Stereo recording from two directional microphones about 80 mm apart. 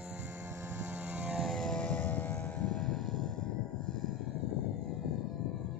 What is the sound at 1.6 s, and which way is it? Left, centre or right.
Vehicle, centre.